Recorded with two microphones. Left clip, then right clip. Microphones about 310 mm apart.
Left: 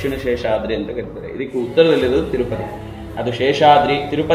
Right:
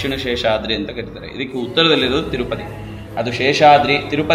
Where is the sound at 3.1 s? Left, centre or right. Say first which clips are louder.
Right 1 dB; right.